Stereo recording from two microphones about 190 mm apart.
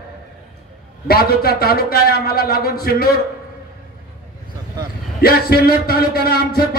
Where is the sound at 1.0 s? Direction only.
55° left (ahead or behind).